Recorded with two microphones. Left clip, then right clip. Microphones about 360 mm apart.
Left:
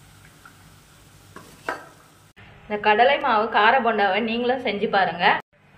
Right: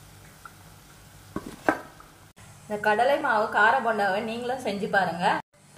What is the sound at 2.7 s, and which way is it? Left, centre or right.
A woman's voice, right.